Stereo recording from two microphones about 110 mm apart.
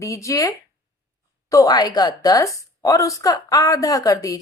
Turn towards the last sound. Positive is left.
turn(degrees=30)  # may be behind; listen again after turning